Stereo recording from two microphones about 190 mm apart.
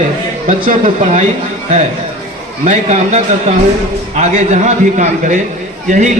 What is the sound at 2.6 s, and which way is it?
A man's voice, 35° right (ahead or behind).